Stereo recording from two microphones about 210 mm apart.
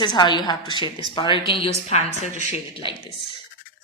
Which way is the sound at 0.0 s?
20° left (ahead or behind).